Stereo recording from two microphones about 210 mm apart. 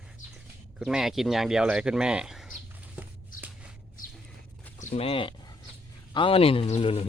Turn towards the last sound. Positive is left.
turn(degrees=30)  # may be behind; listen again after turning